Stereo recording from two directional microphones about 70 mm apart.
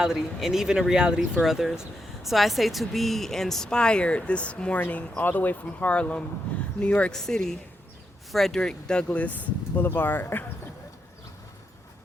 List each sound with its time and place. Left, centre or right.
0.0 s speech: centre
9.7 s speech: left